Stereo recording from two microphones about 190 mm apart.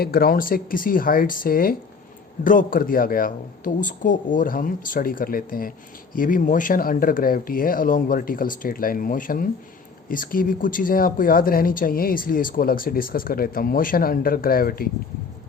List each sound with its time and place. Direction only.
0.0 s speech: 50° left (ahead or behind)